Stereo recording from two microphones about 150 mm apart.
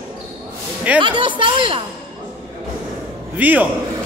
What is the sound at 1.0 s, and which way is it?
Speech, 35° right (ahead or behind).